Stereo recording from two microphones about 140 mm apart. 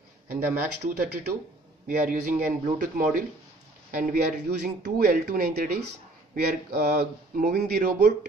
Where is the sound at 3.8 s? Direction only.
70° right (ahead or behind).